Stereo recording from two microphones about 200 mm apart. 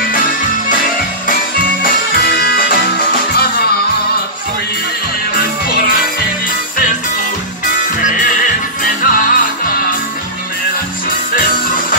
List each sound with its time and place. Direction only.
1.8 s music: 50° left (ahead or behind)
9.0 s music: 45° left (ahead or behind)